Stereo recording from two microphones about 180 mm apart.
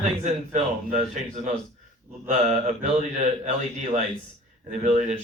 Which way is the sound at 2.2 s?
40° right (ahead or behind).